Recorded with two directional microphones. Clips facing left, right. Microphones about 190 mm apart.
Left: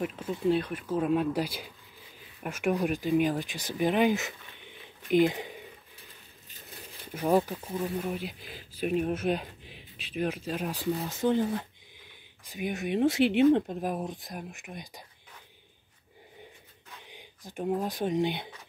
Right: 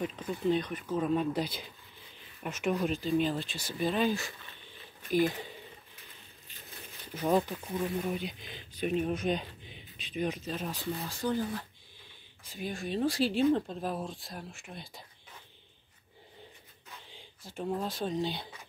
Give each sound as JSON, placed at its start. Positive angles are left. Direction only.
{"t": 0.0, "sound": "speech", "side_deg": 5}
{"t": 7.2, "sound": "speech", "side_deg": 10}
{"t": 17.1, "sound": "speech", "side_deg": 15}